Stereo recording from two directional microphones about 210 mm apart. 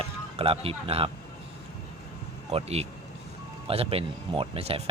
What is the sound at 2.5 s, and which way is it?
Speech, 30° right (ahead or behind).